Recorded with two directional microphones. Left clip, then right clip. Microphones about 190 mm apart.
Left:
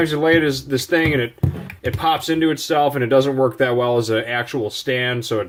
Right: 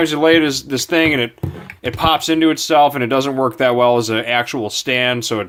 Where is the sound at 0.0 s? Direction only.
50° right (ahead or behind).